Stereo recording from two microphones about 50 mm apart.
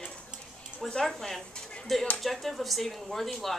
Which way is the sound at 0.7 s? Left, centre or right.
Centre.